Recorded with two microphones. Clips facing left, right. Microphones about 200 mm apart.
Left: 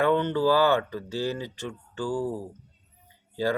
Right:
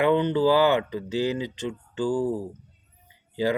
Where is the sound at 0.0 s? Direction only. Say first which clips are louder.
Right 2 dB; 15° right (ahead or behind).